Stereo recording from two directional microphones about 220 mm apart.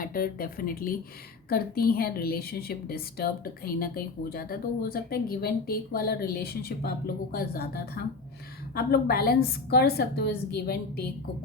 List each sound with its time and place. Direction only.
0.0 s a woman's voice: 40° left (ahead or behind)